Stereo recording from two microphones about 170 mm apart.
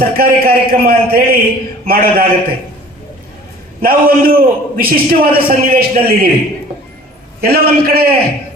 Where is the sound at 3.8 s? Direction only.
60° right (ahead or behind).